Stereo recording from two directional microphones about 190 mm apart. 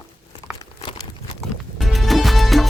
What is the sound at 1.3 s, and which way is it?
Music, centre (ahead or behind).